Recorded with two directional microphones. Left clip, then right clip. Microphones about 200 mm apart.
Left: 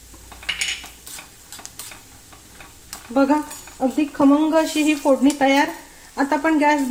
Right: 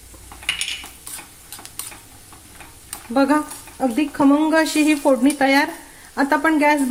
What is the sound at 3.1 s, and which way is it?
Speech, 20° right (ahead or behind).